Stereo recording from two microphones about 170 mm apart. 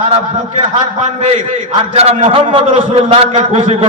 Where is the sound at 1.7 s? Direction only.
35° right (ahead or behind).